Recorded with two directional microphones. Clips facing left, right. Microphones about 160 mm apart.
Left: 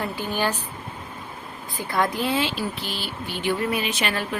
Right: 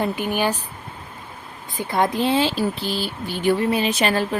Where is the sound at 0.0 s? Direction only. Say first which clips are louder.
Right 4 dB; 15° right (ahead or behind).